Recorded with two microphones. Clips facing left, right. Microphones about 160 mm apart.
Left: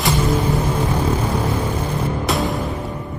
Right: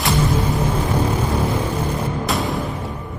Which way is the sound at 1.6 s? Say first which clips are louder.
Even; 10° right (ahead or behind).